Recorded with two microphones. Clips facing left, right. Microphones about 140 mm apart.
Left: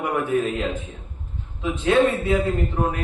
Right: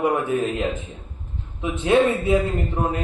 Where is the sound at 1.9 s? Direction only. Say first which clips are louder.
Right 1 dB; 20° right (ahead or behind).